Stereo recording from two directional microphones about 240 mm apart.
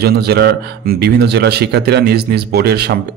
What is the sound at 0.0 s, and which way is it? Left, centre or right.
Speech, right.